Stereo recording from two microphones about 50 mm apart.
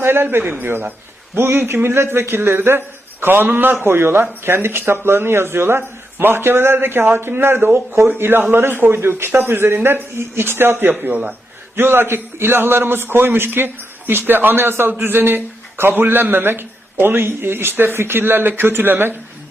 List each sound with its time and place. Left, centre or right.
0.0 s speech: right
3.8 s a man's voice: right
11.8 s speech: right